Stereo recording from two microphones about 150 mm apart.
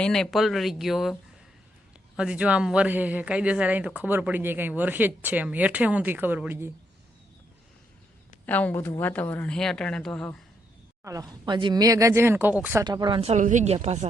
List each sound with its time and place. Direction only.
0.0 s speech: 5° left (ahead or behind); by 6.7 s 15° right (ahead or behind)
8.4 s a woman's voice: 10° left (ahead or behind)
11.0 s speech: 25° right (ahead or behind)
12.8 s speech: 30° right (ahead or behind)
13.3 s speech: 55° right (ahead or behind)